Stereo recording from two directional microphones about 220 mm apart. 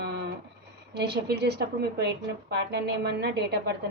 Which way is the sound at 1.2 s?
45° right (ahead or behind).